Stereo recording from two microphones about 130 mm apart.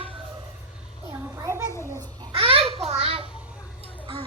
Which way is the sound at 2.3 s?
45° right (ahead or behind).